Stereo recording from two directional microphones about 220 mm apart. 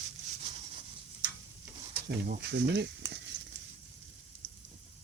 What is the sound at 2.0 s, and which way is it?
Speech, 45° right (ahead or behind).